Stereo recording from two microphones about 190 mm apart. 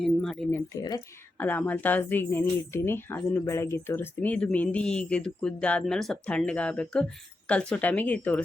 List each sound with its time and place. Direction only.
0.0 s speech: 5° left (ahead or behind)
0.7 s speech: 20° left (ahead or behind)